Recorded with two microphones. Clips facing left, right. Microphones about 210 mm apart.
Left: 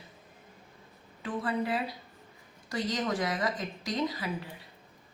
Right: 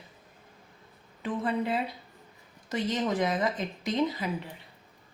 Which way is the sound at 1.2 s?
20° right (ahead or behind).